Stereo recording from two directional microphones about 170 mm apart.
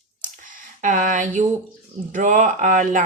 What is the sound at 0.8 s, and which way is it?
A woman's voice, 45° right (ahead or behind).